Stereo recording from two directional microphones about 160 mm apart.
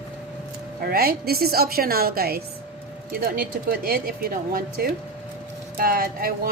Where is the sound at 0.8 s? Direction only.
70° right (ahead or behind).